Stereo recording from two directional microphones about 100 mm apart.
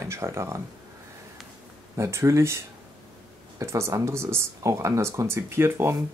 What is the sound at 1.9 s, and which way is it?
Speech, 30° right (ahead or behind).